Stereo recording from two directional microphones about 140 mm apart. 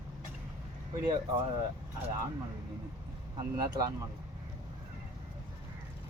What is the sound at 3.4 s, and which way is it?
Speech, 30° right (ahead or behind).